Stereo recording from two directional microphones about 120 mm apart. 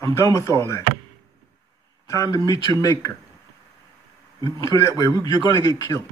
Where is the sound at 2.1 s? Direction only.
30° left (ahead or behind).